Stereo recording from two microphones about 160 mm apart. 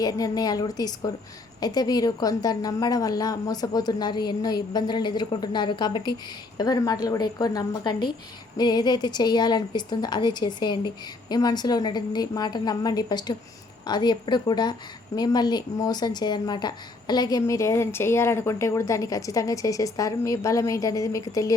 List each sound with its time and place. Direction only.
0.0 s a woman's voice: 25° left (ahead or behind)